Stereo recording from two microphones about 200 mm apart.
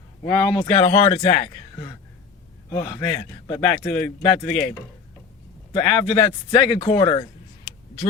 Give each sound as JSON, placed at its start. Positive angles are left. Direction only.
{"t": 0.3, "sound": "a man's voice", "side_deg": 10}
{"t": 0.5, "sound": "speech", "side_deg": 30}
{"t": 2.6, "sound": "a man's voice", "side_deg": 20}
{"t": 4.0, "sound": "speech", "side_deg": 5}
{"t": 5.7, "sound": "speech", "side_deg": 20}